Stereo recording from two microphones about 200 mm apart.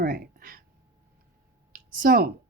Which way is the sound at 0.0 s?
45° right (ahead or behind).